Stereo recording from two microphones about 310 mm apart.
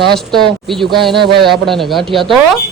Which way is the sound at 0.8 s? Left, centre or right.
Centre.